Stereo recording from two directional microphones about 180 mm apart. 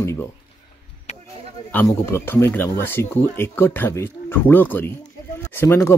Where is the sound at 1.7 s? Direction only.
15° left (ahead or behind).